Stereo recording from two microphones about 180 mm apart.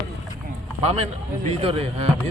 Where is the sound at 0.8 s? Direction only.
35° right (ahead or behind).